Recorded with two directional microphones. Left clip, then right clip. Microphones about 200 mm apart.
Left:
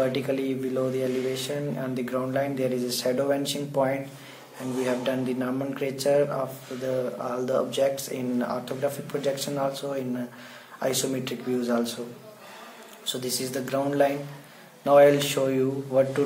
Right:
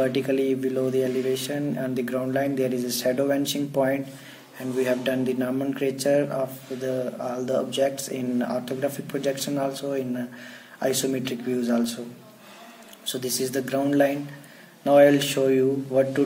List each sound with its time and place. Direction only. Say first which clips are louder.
0.0 s speech: right 3 dB; 40° right (ahead or behind)
13.0 s speech: right 2 dB; 40° right (ahead or behind)